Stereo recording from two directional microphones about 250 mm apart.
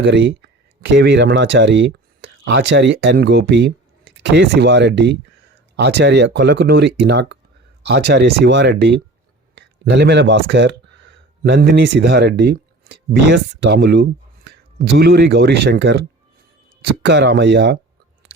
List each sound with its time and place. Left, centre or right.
0.0 s speech: right